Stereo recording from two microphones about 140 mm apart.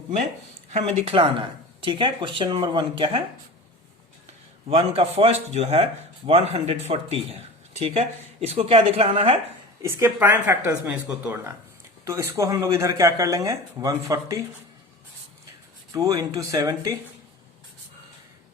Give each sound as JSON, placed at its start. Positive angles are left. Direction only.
{"t": 0.7, "sound": "speech", "side_deg": -50}
{"t": 4.7, "sound": "speech", "side_deg": -45}
{"t": 9.8, "sound": "speech", "side_deg": -15}
{"t": 15.9, "sound": "speech", "side_deg": -25}